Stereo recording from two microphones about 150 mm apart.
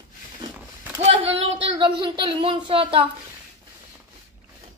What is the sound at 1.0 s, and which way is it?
Speech, 35° right (ahead or behind).